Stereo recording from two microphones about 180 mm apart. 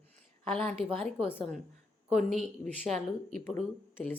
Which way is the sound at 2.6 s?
40° right (ahead or behind).